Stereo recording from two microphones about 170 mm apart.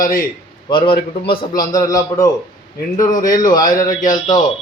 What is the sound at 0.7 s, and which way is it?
A man's voice, 30° left (ahead or behind).